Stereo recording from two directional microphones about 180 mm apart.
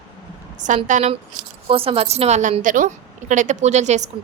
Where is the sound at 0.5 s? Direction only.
45° right (ahead or behind).